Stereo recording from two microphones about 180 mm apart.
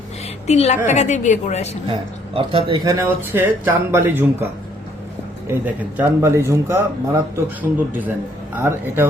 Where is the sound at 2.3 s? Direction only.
30° right (ahead or behind).